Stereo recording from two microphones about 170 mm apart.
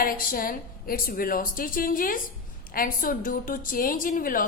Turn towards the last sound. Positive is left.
turn(degrees=55)  # may be behind; listen again after turning